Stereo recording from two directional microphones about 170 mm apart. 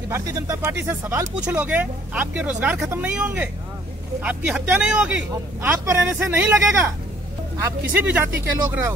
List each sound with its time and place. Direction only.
0.1 s speech: 15° right (ahead or behind)